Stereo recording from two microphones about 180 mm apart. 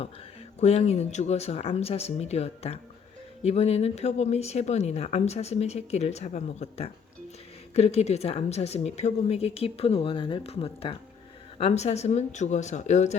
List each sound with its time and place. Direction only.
0.6 s speech: 35° left (ahead or behind)